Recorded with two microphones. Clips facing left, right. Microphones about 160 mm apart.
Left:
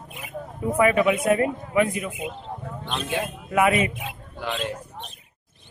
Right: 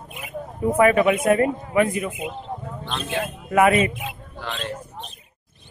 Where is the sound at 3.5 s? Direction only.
50° right (ahead or behind).